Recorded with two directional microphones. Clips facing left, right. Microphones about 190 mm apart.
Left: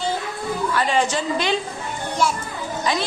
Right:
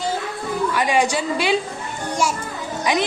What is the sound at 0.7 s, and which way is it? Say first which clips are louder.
Speech: right 1 dB; 15° right (ahead or behind).